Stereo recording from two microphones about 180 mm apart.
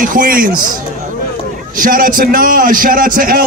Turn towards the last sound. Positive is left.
turn(degrees=-50)  # may be behind; listen again after turning